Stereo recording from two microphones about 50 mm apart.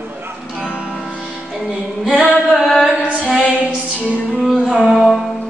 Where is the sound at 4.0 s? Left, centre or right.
Left.